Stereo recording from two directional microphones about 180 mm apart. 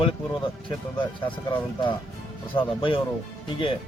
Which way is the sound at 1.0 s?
25° left (ahead or behind).